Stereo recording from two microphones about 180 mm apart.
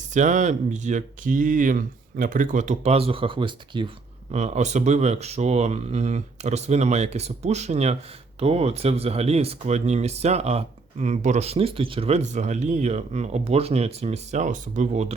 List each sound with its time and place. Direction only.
0.1 s speech: 45° right (ahead or behind)